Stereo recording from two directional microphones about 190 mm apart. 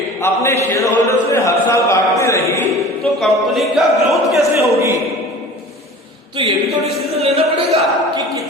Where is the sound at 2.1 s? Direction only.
15° left (ahead or behind).